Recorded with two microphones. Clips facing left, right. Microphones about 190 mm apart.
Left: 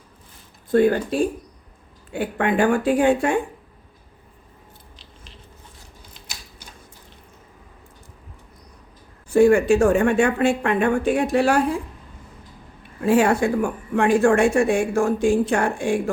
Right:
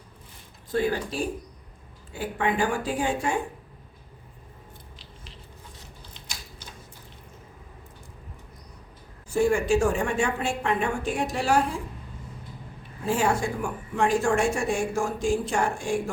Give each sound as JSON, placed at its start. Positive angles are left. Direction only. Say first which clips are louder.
{"t": 0.7, "sound": "speech", "louder": "left 9 dB", "side_deg": 55}
{"t": 6.1, "sound": "a sound", "louder": "even", "side_deg": 5}
{"t": 9.3, "sound": "speech", "louder": "left 7 dB", "side_deg": 60}
{"t": 13.0, "sound": "speech", "louder": "left 7 dB", "side_deg": 65}